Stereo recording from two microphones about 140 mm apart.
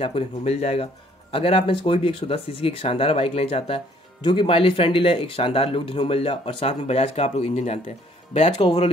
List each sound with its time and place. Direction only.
0.0 s speech: 45° left (ahead or behind)